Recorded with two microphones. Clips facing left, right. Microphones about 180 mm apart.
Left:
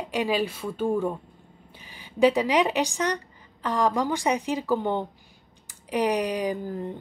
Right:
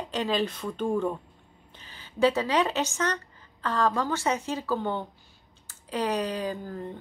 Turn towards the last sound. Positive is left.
turn(degrees=15)  # may be behind; listen again after turning